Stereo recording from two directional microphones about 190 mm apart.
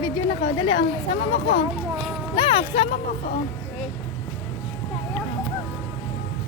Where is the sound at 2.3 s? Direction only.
25° left (ahead or behind).